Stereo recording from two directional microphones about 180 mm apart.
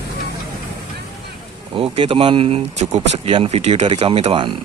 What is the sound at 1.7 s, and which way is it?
Speech, 30° right (ahead or behind).